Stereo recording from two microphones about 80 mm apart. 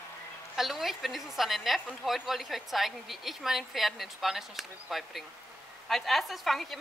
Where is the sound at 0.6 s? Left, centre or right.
Centre.